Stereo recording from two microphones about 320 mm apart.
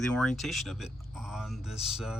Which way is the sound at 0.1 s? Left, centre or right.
Centre.